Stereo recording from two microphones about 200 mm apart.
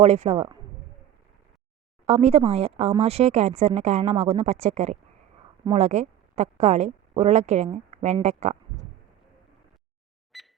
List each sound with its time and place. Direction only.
0.0 s speech: 30° right (ahead or behind)
2.0 s speech: 30° right (ahead or behind)
10.3 s cash register: centre (ahead or behind)